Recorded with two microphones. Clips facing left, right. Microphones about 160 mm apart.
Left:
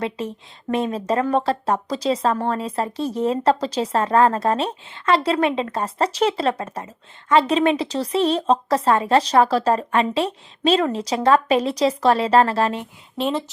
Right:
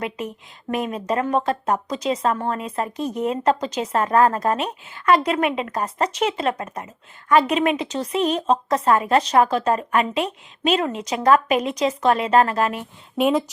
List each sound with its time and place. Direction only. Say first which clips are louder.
0.0 s speech: left 2 dB; 30° left (ahead or behind)
13.1 s speech: right 4 dB; 5° right (ahead or behind)